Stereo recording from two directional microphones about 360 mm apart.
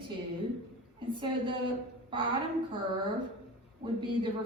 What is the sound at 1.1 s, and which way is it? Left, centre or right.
Speech, centre.